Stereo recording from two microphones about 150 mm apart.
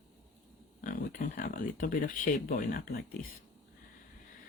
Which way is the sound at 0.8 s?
65° left (ahead or behind).